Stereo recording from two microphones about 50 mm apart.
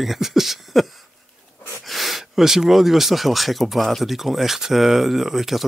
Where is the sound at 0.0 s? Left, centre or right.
Centre.